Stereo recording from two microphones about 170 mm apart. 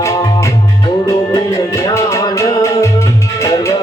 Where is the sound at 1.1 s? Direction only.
20° left (ahead or behind).